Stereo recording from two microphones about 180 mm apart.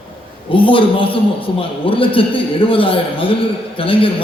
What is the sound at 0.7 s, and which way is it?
A man's voice, 30° left (ahead or behind).